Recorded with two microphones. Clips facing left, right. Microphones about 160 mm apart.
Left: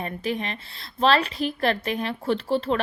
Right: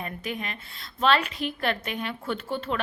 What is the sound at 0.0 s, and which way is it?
A woman's voice, 30° left (ahead or behind).